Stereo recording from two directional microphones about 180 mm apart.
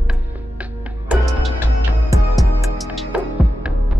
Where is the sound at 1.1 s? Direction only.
Centre (ahead or behind).